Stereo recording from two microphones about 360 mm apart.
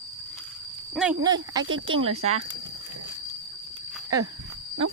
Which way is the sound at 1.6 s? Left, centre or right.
Right.